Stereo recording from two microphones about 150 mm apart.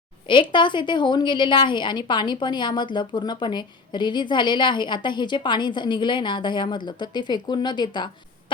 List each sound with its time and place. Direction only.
0.3 s a woman's voice: 35° left (ahead or behind)